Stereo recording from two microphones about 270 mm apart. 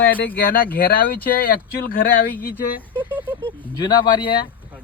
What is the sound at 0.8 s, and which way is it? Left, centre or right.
Speech, left.